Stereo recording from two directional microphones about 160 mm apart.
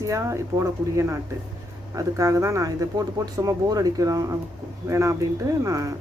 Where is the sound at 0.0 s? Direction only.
20° right (ahead or behind).